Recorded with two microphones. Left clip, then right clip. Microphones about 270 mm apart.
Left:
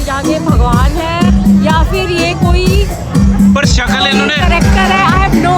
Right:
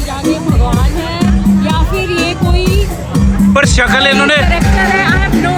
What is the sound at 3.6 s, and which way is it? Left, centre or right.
Speech, centre.